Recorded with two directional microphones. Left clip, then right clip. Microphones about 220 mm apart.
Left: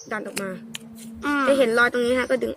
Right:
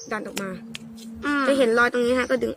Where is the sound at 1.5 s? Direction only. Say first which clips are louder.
Left 1 dB; 10° right (ahead or behind).